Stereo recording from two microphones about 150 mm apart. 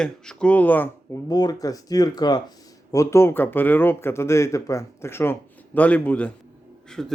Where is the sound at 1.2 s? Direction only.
25° left (ahead or behind).